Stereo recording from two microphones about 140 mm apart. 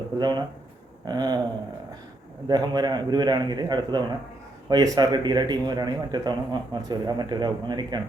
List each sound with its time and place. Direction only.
0.2 s a man's voice: 30° right (ahead or behind)
2.5 s a man's voice: 30° right (ahead or behind)